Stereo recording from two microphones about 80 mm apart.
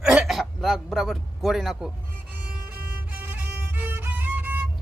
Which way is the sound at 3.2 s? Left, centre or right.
Right.